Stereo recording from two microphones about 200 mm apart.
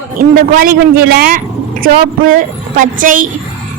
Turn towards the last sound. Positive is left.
turn(degrees=-40)  # may be behind; listen again after turning